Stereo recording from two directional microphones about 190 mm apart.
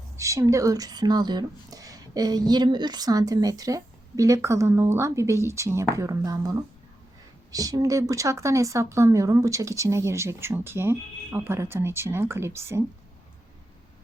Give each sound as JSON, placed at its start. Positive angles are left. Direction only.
{"t": 0.2, "sound": "speech", "side_deg": -15}